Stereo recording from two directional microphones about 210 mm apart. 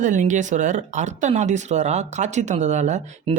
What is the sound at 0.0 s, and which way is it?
Speech, 35° right (ahead or behind).